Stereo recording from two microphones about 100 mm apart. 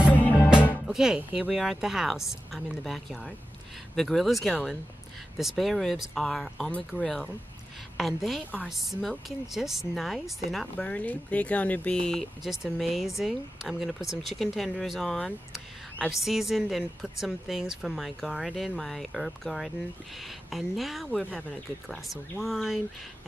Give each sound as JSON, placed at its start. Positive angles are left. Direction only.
{"t": 0.1, "sound": "music", "side_deg": 15}
{"t": 0.8, "sound": "speech", "side_deg": -5}
{"t": 8.4, "sound": "speech", "side_deg": 15}
{"t": 8.6, "sound": "speech", "side_deg": 0}
{"t": 10.8, "sound": "speech", "side_deg": 15}